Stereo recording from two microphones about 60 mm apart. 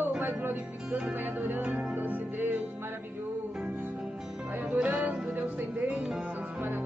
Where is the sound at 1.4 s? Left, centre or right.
Right.